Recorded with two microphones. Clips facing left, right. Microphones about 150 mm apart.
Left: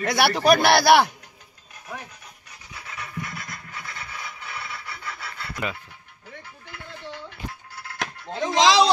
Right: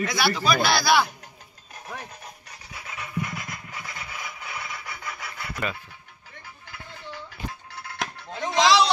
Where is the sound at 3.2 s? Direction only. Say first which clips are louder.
Right 2 dB; 15° right (ahead or behind).